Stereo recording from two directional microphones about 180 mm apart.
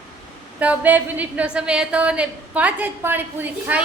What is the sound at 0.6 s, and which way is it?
A woman's voice, 10° right (ahead or behind).